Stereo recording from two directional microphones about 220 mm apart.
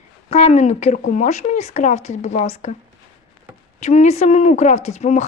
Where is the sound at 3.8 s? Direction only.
30° left (ahead or behind).